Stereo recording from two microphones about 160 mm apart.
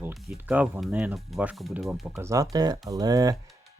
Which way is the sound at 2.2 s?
20° right (ahead or behind).